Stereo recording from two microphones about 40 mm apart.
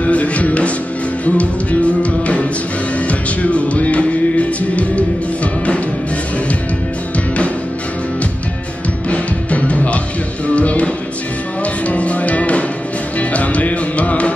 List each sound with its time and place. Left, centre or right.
0.0 s music: left
9.1 s music: left